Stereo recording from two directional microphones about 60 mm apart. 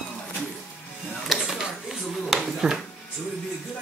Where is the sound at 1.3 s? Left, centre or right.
Centre.